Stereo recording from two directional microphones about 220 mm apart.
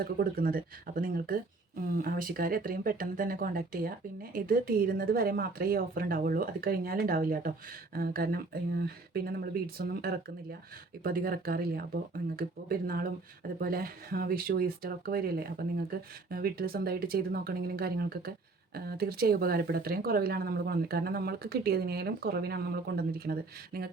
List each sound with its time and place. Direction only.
0.0 s speech: 45° right (ahead or behind)